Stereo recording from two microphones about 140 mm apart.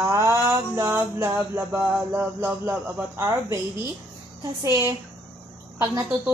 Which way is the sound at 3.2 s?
20° right (ahead or behind).